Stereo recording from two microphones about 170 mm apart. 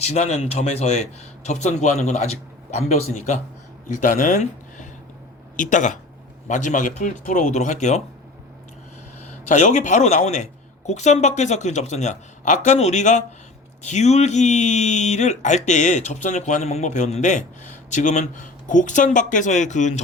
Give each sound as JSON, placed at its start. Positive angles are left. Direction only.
{"t": 0.0, "sound": "speech", "side_deg": 40}
{"t": 9.5, "sound": "speech", "side_deg": 45}